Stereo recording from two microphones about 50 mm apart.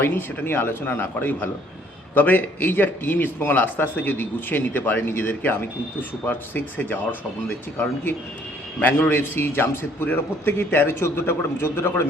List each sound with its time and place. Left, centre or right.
0.0 s a man's voice: left
8.8 s a man's voice: left